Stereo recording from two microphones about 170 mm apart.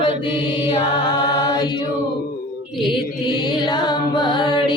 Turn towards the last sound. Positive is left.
turn(degrees=30)  # may be behind; listen again after turning